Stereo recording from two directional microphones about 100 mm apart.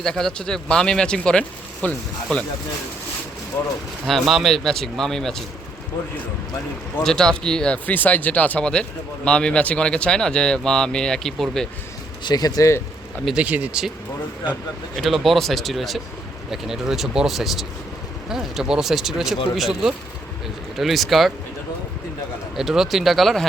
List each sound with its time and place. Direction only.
0.0 s speech: 5° left (ahead or behind)
3.6 s speech: 25° left (ahead or behind)
4.0 s speech: centre (ahead or behind)
7.0 s speech: 5° left (ahead or behind)
12.2 s speech: 40° left (ahead or behind)
13.2 s speech: 10° right (ahead or behind)
15.0 s speech: centre (ahead or behind)
22.5 s speech: 5° right (ahead or behind)